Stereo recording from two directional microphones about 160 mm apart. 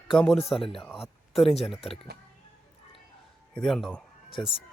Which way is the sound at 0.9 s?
Centre (ahead or behind).